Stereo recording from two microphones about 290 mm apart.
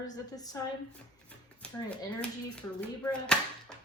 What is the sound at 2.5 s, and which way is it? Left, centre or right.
Speech, centre.